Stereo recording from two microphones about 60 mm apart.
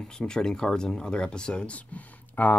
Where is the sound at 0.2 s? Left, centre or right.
Centre.